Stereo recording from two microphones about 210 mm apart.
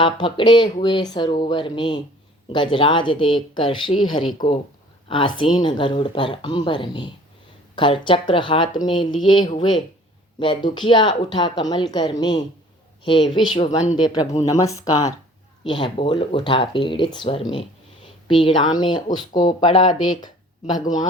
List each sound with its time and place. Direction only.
0.0 s speech: 25° left (ahead or behind)
13.7 s speech: 35° left (ahead or behind)
14.0 s speech: 20° left (ahead or behind)
19.3 s speech: 35° left (ahead or behind)
19.5 s speech: 20° left (ahead or behind)